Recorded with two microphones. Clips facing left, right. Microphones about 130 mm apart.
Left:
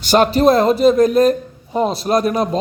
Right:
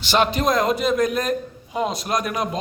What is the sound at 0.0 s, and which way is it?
Speech, 45° left (ahead or behind).